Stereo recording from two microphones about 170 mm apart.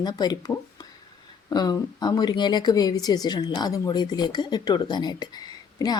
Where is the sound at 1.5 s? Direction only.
25° left (ahead or behind).